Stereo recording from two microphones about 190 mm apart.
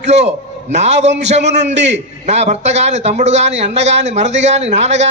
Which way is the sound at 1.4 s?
65° right (ahead or behind).